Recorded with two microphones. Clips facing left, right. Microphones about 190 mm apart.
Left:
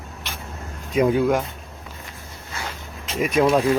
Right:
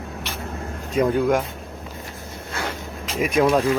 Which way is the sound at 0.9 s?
5° left (ahead or behind).